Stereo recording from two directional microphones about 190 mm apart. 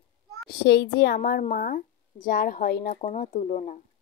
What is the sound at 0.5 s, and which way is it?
Speech, 60° left (ahead or behind).